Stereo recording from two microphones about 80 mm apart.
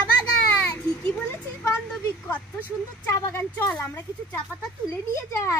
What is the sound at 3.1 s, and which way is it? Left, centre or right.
A woman's voice, left.